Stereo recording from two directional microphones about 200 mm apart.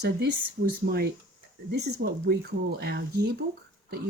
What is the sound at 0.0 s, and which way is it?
Speech, 50° right (ahead or behind).